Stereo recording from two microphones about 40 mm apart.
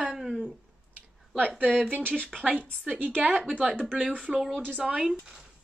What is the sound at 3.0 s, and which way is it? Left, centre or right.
Speech, right.